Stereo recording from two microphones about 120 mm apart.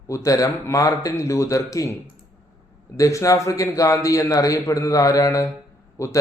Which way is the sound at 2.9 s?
25° left (ahead or behind).